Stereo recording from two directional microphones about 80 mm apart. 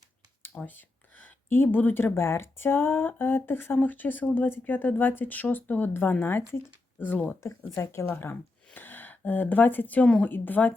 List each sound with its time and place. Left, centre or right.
0.5 s a woman's voice: left